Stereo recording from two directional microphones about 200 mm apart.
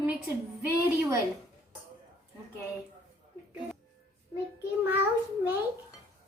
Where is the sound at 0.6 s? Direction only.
15° right (ahead or behind).